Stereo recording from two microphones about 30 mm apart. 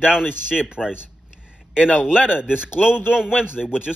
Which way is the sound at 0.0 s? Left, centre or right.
Right.